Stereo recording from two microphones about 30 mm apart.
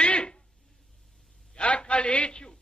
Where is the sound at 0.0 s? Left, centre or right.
Left.